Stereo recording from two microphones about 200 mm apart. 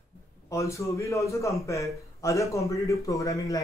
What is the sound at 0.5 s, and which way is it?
Speech, 15° left (ahead or behind).